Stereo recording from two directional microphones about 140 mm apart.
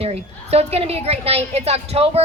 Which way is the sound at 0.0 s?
45° right (ahead or behind).